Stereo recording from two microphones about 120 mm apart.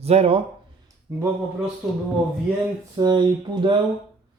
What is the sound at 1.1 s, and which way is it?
Speech, 30° right (ahead or behind).